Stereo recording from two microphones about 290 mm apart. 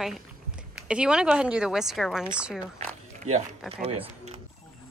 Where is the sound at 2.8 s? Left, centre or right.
Right.